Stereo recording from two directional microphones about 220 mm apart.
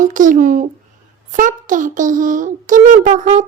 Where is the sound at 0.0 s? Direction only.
35° right (ahead or behind).